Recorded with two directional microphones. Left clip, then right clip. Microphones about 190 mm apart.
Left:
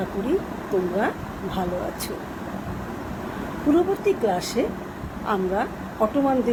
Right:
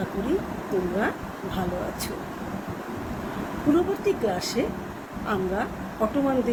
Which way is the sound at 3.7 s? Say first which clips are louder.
Left 4 dB; centre (ahead or behind).